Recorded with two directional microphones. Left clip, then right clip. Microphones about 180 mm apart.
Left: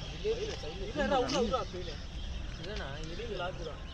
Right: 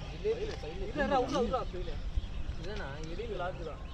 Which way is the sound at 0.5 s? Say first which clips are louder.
Left 1 dB; 15° left (ahead or behind).